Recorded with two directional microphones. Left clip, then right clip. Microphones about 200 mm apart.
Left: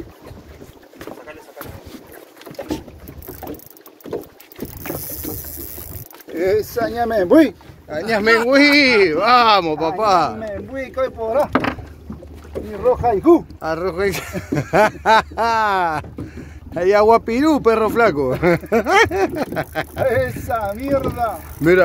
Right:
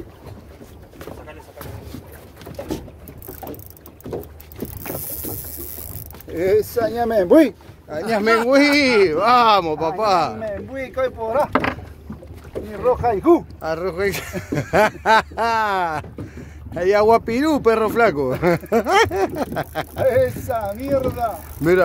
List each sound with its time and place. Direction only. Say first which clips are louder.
6.3 s speech: even; 50° right (ahead or behind)
7.9 s speech: left 2 dB; 20° right (ahead or behind)
12.7 s speech: left 2 dB; 5° right (ahead or behind)
18.3 s speech: left 2 dB; 10° right (ahead or behind)
20.1 s speech: right 3 dB; 30° right (ahead or behind)